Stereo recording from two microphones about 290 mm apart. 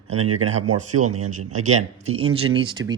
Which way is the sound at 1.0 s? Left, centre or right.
Right.